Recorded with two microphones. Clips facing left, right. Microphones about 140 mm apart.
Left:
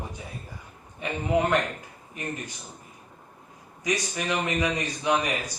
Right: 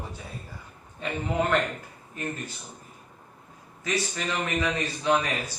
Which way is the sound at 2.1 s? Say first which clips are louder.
Right 1 dB; 15° left (ahead or behind).